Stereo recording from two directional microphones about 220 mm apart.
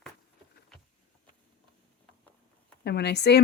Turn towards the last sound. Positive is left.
turn(degrees=50)  # may be behind; listen again after turning